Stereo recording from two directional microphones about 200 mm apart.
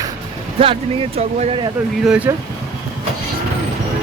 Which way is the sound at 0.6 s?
30° right (ahead or behind).